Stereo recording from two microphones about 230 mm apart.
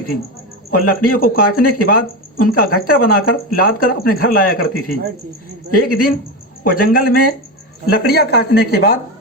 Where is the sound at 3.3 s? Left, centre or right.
Left.